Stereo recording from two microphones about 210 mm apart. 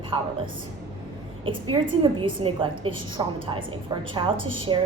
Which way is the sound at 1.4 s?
25° right (ahead or behind).